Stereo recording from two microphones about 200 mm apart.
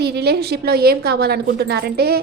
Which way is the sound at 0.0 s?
50° right (ahead or behind).